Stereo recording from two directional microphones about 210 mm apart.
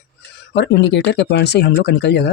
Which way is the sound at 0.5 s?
55° left (ahead or behind).